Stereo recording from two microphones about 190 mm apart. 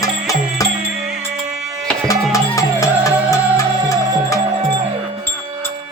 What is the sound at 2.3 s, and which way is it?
Music, 15° left (ahead or behind).